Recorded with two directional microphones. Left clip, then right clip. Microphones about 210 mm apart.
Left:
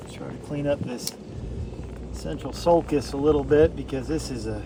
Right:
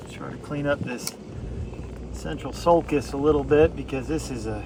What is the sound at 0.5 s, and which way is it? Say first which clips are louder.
Speech: even; 15° right (ahead or behind).